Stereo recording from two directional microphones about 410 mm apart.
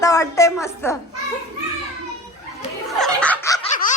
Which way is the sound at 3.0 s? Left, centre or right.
Centre.